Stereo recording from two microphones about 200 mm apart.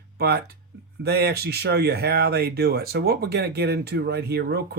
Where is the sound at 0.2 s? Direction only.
50° right (ahead or behind).